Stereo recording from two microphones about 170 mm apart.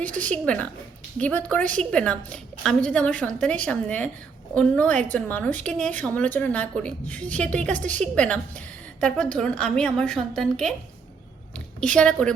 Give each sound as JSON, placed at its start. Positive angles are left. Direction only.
{"t": 0.2, "sound": "a woman's voice", "side_deg": 5}
{"t": 7.8, "sound": "a woman's voice", "side_deg": -45}
{"t": 8.0, "sound": "a woman's voice", "side_deg": 5}
{"t": 11.8, "sound": "a woman's voice", "side_deg": 5}